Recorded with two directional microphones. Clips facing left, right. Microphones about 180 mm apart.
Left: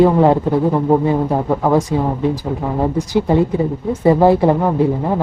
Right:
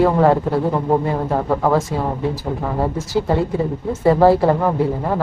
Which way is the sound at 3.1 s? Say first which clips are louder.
Left 3 dB; 20° left (ahead or behind).